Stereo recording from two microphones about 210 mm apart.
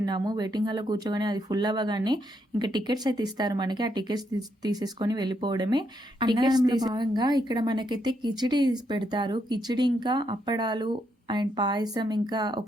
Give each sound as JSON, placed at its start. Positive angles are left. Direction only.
{"t": 0.0, "sound": "a woman's voice", "side_deg": -20}